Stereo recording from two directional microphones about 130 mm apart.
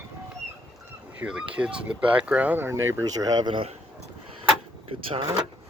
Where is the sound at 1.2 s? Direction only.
10° right (ahead or behind); by 3.7 s 40° right (ahead or behind).